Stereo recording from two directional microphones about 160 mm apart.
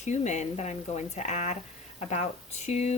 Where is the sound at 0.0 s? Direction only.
45° left (ahead or behind).